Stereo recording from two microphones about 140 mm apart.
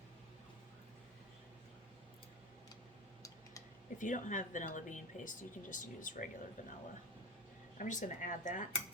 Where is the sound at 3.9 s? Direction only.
65° left (ahead or behind).